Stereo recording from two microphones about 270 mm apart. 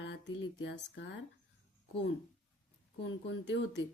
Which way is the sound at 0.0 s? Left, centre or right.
Left.